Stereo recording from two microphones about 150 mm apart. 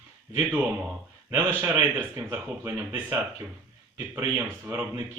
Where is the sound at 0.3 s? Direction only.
10° right (ahead or behind).